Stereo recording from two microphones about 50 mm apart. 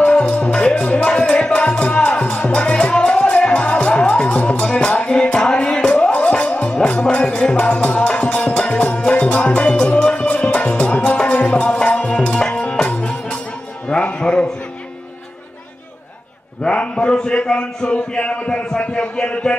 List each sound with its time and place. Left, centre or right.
0.0 s music: left
16.6 s a man's voice: left